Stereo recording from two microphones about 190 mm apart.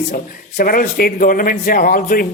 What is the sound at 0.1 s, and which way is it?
Speech, 50° left (ahead or behind).